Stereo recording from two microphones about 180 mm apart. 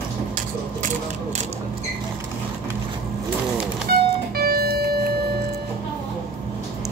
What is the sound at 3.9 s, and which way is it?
Music, 55° right (ahead or behind).